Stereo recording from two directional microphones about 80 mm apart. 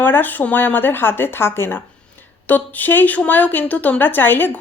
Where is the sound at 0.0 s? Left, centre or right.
Left.